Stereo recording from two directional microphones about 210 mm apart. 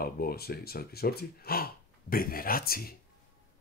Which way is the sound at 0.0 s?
45° left (ahead or behind).